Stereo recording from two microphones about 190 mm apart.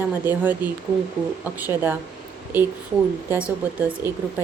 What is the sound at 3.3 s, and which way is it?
Speech, 5° right (ahead or behind).